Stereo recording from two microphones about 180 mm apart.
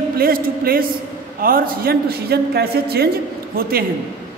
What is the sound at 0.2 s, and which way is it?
A man's voice, 55° right (ahead or behind).